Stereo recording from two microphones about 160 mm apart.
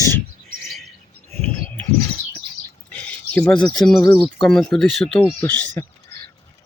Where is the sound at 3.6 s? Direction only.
5° left (ahead or behind).